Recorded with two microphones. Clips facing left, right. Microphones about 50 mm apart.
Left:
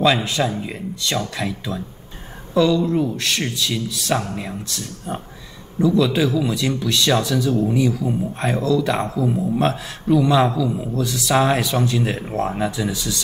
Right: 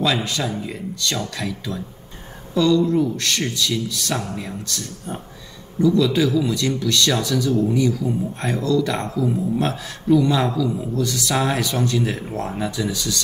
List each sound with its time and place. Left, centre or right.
0.0 s a man's voice: left